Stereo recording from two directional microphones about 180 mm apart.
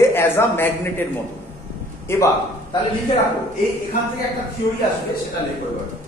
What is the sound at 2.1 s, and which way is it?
Speech, 15° left (ahead or behind).